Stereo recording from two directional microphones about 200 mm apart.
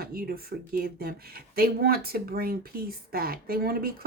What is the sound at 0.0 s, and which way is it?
Speech, 50° right (ahead or behind).